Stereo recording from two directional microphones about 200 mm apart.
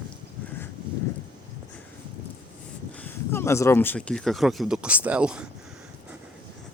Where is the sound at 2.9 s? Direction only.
10° left (ahead or behind).